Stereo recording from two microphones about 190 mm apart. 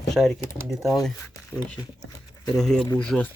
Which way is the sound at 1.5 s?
20° left (ahead or behind).